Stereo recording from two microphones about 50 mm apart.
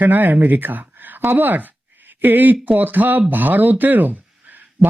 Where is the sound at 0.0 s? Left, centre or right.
Right.